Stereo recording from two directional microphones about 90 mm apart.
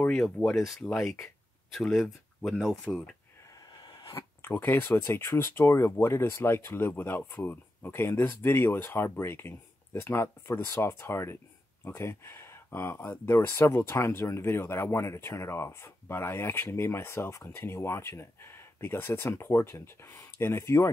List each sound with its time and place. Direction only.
0.0 s speech: 10° left (ahead or behind)
4.0 s speech: 35° left (ahead or behind)